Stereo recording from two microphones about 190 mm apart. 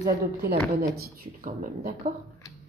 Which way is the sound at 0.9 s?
50° right (ahead or behind).